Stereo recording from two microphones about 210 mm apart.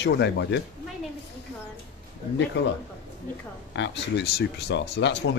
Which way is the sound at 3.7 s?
60° left (ahead or behind).